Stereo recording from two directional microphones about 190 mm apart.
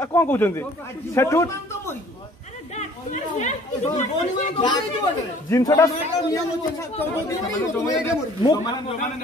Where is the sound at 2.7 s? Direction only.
40° left (ahead or behind).